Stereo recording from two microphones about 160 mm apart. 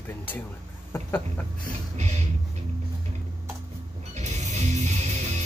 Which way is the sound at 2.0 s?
45° right (ahead or behind).